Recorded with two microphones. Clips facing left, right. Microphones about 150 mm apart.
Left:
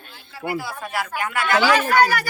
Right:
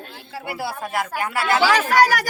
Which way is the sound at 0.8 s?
45° right (ahead or behind).